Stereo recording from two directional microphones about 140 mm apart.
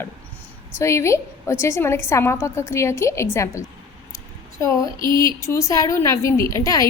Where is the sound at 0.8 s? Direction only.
20° left (ahead or behind).